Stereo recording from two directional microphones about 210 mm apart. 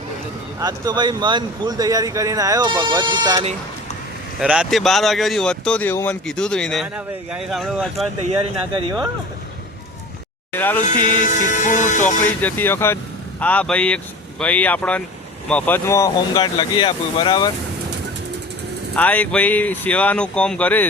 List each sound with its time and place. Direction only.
0.6 s speech: 20° right (ahead or behind)
4.4 s speech: 5° right (ahead or behind)
8.7 s speech: 20° right (ahead or behind)
10.5 s speech: 10° left (ahead or behind)
10.8 s music: 35° left (ahead or behind)
12.2 s speech: 10° left (ahead or behind)
18.9 s speech: 5° left (ahead or behind)